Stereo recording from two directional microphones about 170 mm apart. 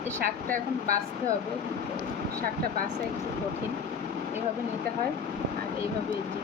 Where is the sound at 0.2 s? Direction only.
60° right (ahead or behind).